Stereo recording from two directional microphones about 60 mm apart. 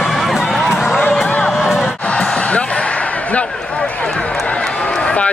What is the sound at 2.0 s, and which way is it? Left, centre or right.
Slam, centre.